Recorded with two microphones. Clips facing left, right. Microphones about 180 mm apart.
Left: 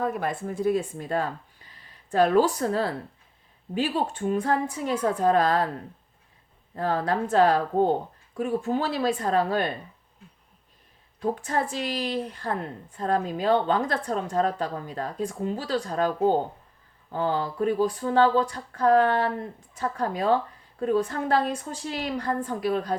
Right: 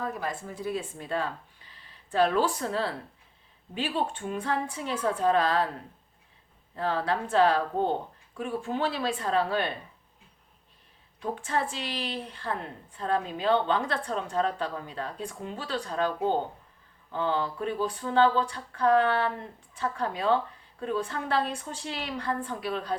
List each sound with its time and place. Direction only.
0.0 s a woman's voice: 55° left (ahead or behind)
6.7 s a woman's voice: 45° left (ahead or behind)
11.2 s a woman's voice: 40° left (ahead or behind)